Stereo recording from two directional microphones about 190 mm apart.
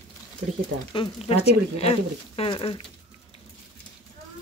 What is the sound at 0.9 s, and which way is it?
Speech, 30° left (ahead or behind).